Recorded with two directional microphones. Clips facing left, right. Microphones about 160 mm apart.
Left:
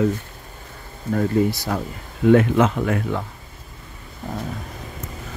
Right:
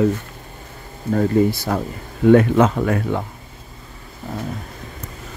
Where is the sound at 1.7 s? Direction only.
45° right (ahead or behind).